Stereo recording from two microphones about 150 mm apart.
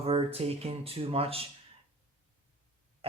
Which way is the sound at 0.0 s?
40° right (ahead or behind).